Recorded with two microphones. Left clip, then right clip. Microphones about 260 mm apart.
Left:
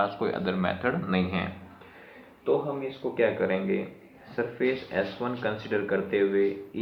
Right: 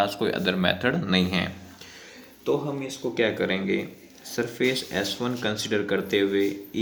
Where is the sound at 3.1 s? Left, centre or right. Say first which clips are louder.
Even; right.